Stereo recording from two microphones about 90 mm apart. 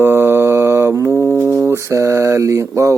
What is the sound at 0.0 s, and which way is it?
Mantra, 25° right (ahead or behind).